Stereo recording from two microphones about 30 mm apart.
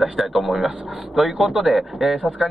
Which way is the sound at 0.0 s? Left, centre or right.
Centre.